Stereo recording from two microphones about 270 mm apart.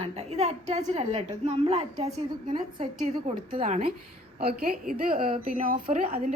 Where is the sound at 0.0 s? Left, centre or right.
Right.